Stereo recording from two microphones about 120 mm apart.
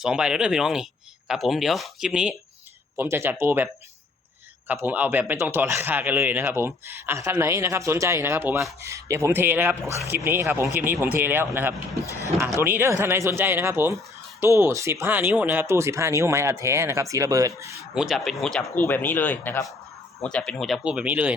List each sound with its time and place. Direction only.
0.0 s speech: 5° right (ahead or behind)
3.0 s a man's voice: 20° right (ahead or behind)
4.7 s a man's voice: 15° right (ahead or behind)
17.9 s speech: 5° right (ahead or behind)
18.8 s speech: 15° left (ahead or behind)
20.8 s speech: 10° right (ahead or behind)